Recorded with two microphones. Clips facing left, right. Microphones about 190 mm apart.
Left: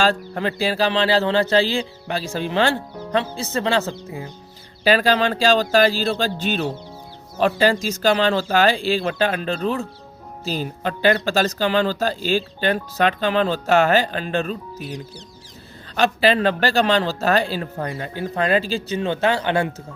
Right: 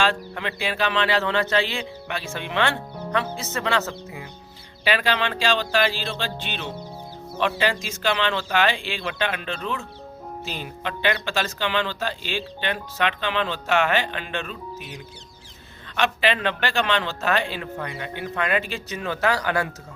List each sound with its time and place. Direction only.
0.0 s speech: 40° left (ahead or behind)